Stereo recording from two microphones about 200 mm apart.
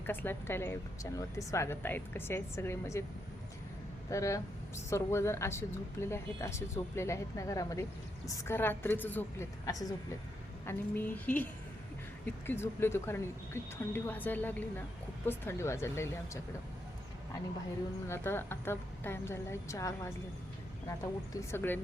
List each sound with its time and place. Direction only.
0.0 s speech: 10° left (ahead or behind)
4.1 s speech: 15° left (ahead or behind)
18.1 s speech: 10° left (ahead or behind)
21.5 s speech: 10° left (ahead or behind)